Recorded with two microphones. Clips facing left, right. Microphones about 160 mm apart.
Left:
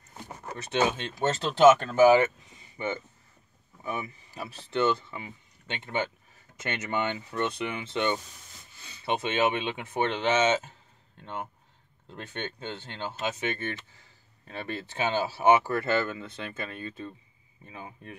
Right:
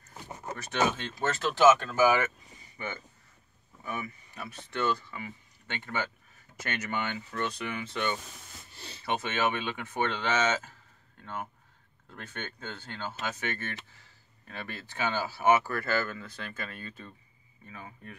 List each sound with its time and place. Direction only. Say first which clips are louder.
0.6 s speech: left 2 dB; 20° left (ahead or behind)
8.7 s a sound: right 7 dB; 30° right (ahead or behind)
9.0 s speech: left 3 dB; 20° left (ahead or behind)
12.1 s speech: left 4 dB; 20° left (ahead or behind)